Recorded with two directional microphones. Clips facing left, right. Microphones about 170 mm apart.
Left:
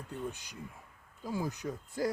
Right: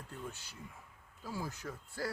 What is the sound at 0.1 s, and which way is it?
Speech, 15° left (ahead or behind).